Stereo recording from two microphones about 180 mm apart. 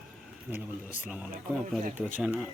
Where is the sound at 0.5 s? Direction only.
15° right (ahead or behind).